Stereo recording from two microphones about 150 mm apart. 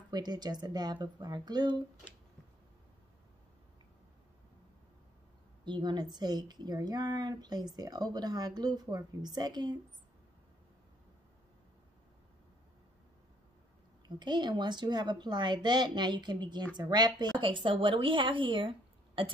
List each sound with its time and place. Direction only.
0.1 s speech: 25° right (ahead or behind)
5.7 s speech: 30° right (ahead or behind)
14.0 s speech: 30° right (ahead or behind)